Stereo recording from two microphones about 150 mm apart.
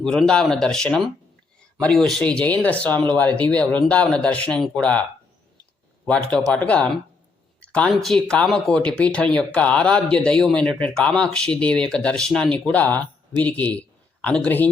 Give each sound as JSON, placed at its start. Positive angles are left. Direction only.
{"t": 0.3, "sound": "speech", "side_deg": 5}
{"t": 6.1, "sound": "speech", "side_deg": 10}